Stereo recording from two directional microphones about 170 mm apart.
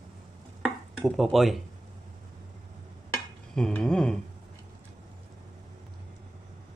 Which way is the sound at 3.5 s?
5° left (ahead or behind).